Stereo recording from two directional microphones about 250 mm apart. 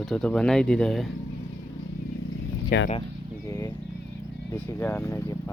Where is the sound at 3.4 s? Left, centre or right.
Centre.